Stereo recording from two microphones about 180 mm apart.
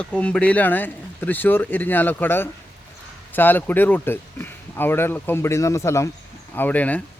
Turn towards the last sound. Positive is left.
turn(degrees=10)  # may be behind; listen again after turning